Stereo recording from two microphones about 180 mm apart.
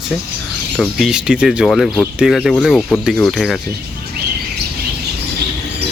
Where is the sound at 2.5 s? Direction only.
5° left (ahead or behind).